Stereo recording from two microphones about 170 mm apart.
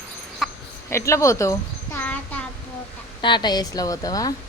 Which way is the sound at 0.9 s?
15° left (ahead or behind).